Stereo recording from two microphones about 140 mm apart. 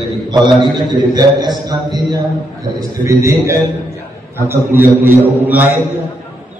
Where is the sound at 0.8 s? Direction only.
30° right (ahead or behind).